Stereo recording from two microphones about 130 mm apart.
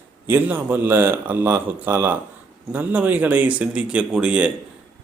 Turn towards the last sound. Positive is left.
turn(degrees=-10)  # may be behind; listen again after turning